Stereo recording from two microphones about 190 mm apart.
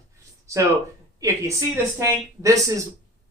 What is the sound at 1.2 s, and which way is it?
Speech, 15° right (ahead or behind).